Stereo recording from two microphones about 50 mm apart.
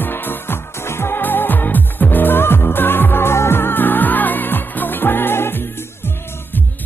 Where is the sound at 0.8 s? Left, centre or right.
Left.